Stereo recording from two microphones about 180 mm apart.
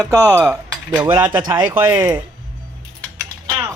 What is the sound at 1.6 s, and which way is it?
Speech, 10° right (ahead or behind).